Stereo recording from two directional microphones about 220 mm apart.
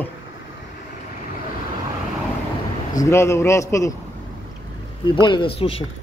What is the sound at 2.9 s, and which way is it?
A man's voice, 10° left (ahead or behind).